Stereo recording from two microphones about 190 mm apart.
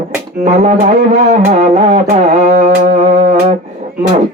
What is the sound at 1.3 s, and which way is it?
Music, 45° right (ahead or behind).